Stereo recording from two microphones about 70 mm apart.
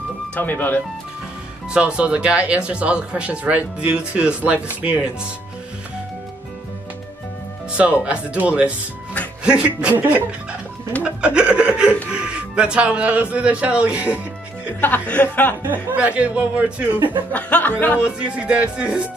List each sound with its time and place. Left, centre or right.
0.4 s speech: left
1.7 s speech: centre
8.0 s speech: centre
9.4 s music: centre
9.8 s speech: right
14.8 s speech: left
15.6 s speech: right
17.3 s speech: left
18.0 s speech: centre